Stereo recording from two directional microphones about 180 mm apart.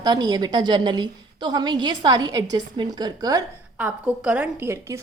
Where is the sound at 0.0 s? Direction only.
20° right (ahead or behind).